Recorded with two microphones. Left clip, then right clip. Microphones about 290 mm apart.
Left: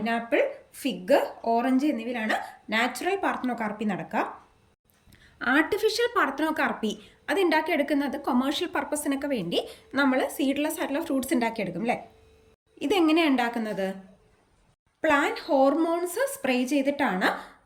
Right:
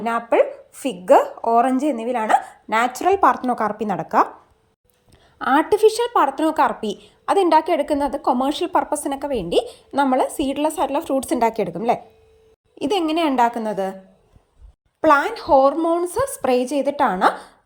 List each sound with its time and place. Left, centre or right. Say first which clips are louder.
0.0 s a woman's voice: right 7 dB; centre
12.8 s a woman's voice: right 3 dB; centre
15.0 s a woman's voice: right 8 dB; centre